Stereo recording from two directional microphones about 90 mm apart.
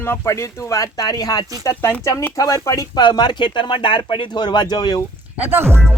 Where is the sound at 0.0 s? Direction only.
30° left (ahead or behind).